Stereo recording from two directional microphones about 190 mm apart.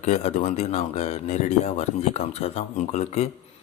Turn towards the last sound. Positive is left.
turn(degrees=35)  # may be behind; listen again after turning